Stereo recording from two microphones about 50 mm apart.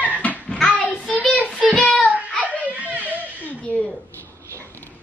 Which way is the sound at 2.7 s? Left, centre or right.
Right.